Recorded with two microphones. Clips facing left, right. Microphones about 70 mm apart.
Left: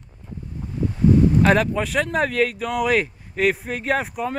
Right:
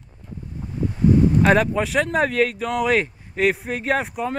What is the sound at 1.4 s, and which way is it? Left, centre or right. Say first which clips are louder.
Speech: right 1 dB; centre.